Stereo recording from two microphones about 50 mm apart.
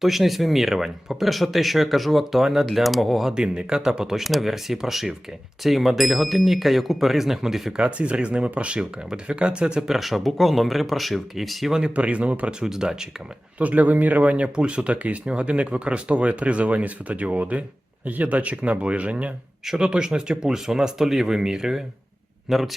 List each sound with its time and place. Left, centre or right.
0.0 s speech: centre
3.3 s speech: centre
4.2 s speech: centre
7.8 s speech: right
9.9 s speech: centre
11.9 s speech: right
12.5 s speech: centre
13.6 s speech: right; by 22.7 s centre